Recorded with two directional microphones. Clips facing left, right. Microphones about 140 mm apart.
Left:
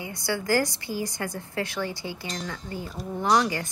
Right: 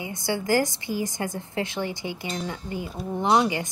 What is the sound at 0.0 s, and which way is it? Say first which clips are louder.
A woman's voice: right 2 dB; 20° right (ahead or behind).